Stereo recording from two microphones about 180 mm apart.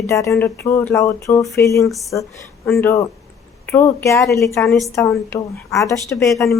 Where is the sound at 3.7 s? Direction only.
15° left (ahead or behind).